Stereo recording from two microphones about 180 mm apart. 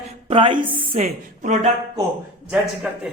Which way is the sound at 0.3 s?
30° right (ahead or behind).